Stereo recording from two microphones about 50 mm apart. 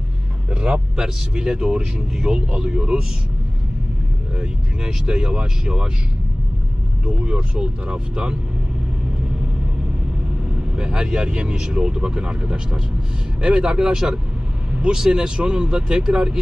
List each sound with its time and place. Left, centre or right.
0.5 s speech: right
4.4 s speech: centre
7.1 s speech: centre
10.8 s speech: centre